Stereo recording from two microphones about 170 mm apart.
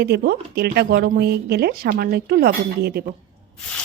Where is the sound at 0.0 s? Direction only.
70° right (ahead or behind).